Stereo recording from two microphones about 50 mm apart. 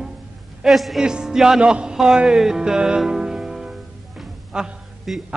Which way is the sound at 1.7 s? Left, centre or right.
Centre.